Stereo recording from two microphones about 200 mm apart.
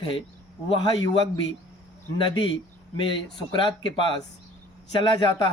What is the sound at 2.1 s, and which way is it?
Speech, 25° left (ahead or behind).